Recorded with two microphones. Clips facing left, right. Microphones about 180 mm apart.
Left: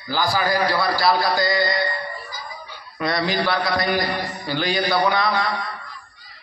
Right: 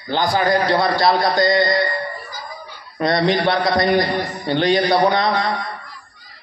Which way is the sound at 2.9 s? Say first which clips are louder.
Right 5 dB; 25° right (ahead or behind).